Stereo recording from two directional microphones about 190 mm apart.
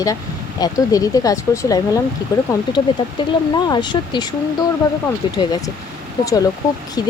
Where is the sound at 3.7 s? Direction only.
25° left (ahead or behind).